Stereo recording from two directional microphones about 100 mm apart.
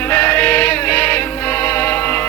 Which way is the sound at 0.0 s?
20° left (ahead or behind).